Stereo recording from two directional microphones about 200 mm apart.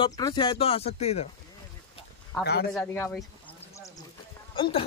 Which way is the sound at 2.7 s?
10° left (ahead or behind).